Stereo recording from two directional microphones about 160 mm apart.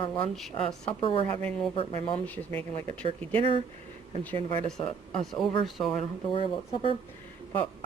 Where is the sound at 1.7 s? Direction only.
35° left (ahead or behind).